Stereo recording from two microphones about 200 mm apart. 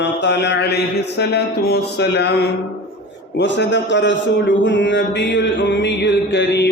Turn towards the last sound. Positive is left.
turn(degrees=60)  # may be behind; listen again after turning